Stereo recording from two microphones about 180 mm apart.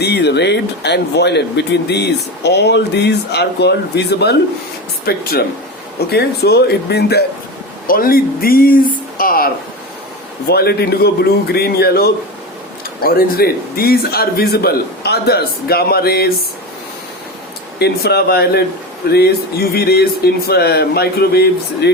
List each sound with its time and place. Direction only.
0.0 s a man's voice: 70° left (ahead or behind)
7.9 s speech: 55° left (ahead or behind)
10.5 s a man's voice: 60° left (ahead or behind)
17.7 s a man's voice: 65° left (ahead or behind)